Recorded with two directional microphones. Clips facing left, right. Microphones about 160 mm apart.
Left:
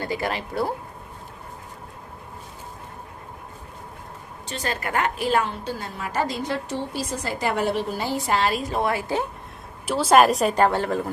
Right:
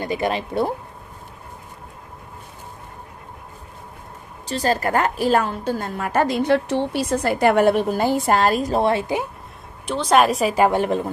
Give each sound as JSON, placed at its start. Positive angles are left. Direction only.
{"t": 0.0, "sound": "speech", "side_deg": -20}
{"t": 4.5, "sound": "a woman's voice", "side_deg": -35}
{"t": 9.8, "sound": "a woman's voice", "side_deg": 5}
{"t": 10.6, "sound": "a woman's voice", "side_deg": -15}